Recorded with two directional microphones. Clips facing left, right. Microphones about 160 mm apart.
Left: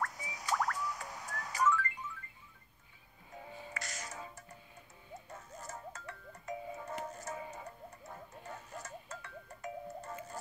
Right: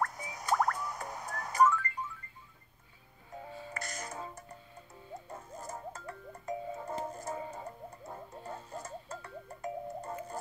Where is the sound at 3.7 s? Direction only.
50° right (ahead or behind).